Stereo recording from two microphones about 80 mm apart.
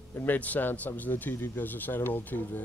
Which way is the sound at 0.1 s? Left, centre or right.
Left.